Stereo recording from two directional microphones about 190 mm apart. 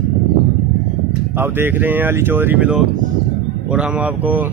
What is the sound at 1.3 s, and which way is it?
Speech, 10° right (ahead or behind).